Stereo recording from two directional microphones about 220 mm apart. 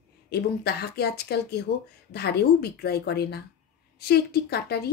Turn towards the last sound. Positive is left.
turn(degrees=45)  # may be behind; listen again after turning